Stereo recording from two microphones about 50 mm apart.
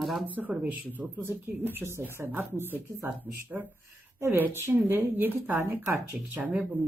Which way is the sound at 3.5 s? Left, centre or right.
Centre.